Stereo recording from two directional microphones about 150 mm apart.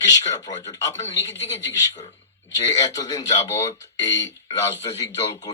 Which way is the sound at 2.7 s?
25° left (ahead or behind).